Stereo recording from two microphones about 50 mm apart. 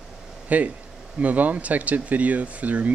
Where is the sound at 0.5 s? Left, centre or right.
Right.